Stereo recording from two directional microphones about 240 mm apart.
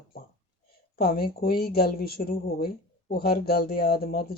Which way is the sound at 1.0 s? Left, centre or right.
Left.